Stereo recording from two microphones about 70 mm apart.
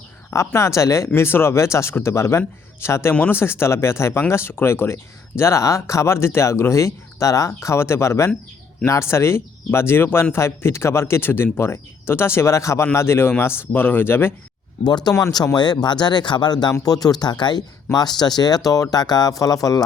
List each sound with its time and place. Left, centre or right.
0.3 s speech: left
14.8 s speech: left
16.8 s speech: left
17.9 s speech: left
19.4 s speech: left